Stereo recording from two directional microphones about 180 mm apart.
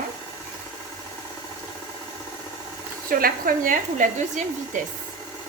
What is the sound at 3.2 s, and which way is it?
Speech, 50° right (ahead or behind).